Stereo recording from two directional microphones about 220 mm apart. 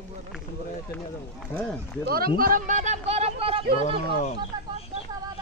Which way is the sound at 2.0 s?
45° right (ahead or behind).